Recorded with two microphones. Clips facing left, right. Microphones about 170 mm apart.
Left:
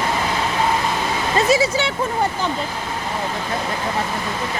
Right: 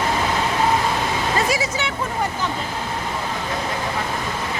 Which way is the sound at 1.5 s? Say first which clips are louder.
Left 6 dB; 30° left (ahead or behind).